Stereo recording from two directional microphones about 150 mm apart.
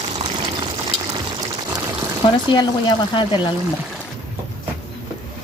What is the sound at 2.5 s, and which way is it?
Speech, 30° left (ahead or behind).